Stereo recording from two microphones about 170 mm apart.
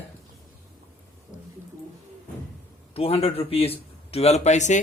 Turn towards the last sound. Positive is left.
turn(degrees=45)  # may be behind; listen again after turning